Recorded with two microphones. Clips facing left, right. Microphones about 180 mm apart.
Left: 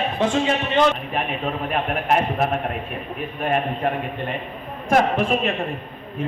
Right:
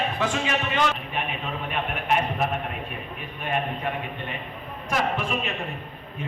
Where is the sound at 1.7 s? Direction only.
45° left (ahead or behind).